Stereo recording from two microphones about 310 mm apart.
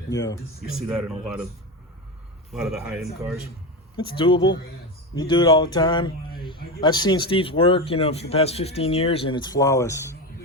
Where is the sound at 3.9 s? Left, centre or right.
Centre.